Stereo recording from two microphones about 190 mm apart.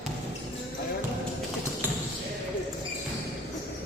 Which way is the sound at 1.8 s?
10° right (ahead or behind).